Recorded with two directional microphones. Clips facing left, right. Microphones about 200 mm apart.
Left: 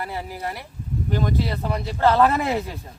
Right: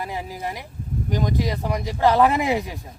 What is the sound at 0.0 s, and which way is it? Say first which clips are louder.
Speech: even; 15° right (ahead or behind).